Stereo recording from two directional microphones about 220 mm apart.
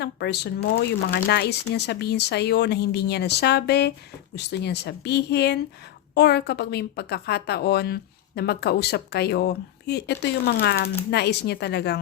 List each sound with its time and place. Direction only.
0.0 s speech: 50° left (ahead or behind)